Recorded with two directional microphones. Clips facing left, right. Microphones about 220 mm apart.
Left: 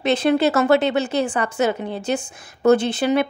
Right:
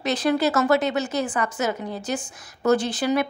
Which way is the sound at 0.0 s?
25° left (ahead or behind).